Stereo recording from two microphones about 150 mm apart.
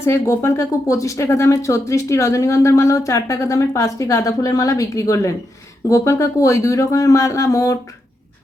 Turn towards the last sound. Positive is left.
turn(degrees=20)  # may be behind; listen again after turning